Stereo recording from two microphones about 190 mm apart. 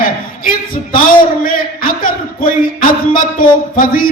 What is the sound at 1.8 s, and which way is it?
Speech, 50° left (ahead or behind).